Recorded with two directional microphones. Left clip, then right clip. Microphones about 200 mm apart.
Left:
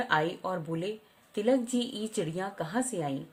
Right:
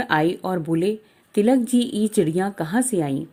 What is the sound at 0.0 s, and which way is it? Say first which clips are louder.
Speech: right 8 dB; 40° right (ahead or behind).